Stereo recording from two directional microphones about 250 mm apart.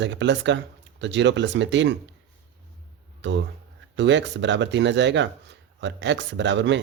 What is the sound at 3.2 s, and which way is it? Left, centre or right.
Speech, right.